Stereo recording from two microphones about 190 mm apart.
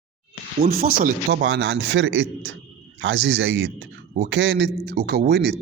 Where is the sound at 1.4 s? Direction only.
70° right (ahead or behind).